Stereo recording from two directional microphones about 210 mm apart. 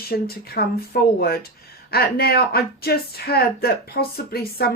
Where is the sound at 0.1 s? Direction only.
45° left (ahead or behind).